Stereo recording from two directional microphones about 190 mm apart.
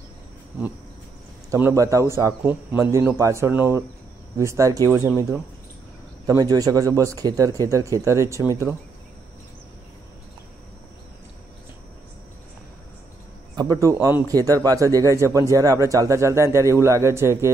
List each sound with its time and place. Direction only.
1.5 s a man's voice: 15° right (ahead or behind)
6.2 s a man's voice: 20° right (ahead or behind)
13.6 s a man's voice: 15° right (ahead or behind)